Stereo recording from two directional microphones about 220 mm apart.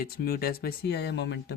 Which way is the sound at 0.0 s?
45° left (ahead or behind).